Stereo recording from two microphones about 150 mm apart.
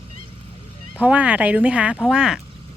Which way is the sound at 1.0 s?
10° right (ahead or behind).